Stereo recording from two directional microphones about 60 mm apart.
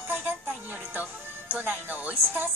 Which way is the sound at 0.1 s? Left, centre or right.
Right.